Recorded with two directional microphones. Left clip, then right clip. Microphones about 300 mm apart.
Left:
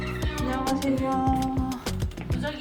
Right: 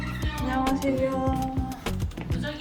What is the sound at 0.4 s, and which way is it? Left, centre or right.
Music, centre.